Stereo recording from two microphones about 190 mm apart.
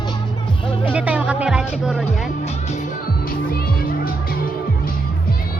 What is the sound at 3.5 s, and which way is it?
Music, 50° left (ahead or behind).